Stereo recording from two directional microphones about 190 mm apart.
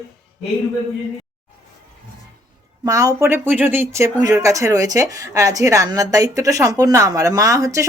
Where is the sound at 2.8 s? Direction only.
15° right (ahead or behind).